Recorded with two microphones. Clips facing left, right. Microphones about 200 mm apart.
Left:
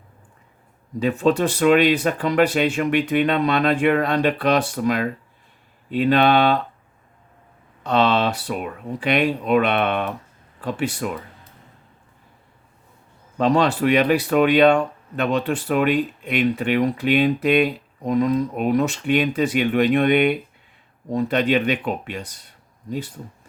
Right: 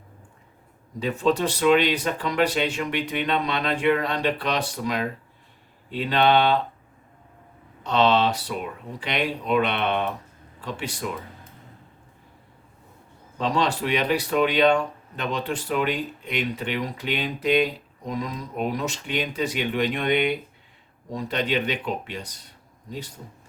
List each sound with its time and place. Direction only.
1.0 s speech: 50° left (ahead or behind)
7.9 s speech: 55° left (ahead or behind)
13.4 s speech: 50° left (ahead or behind)